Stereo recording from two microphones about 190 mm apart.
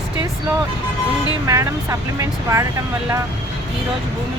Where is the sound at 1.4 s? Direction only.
15° right (ahead or behind).